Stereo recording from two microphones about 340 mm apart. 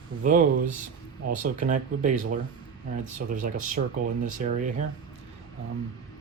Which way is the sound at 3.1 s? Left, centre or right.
Right.